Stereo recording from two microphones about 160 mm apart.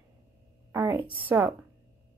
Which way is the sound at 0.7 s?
15° right (ahead or behind).